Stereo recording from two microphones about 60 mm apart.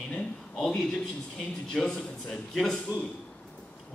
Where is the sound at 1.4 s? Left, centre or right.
Centre.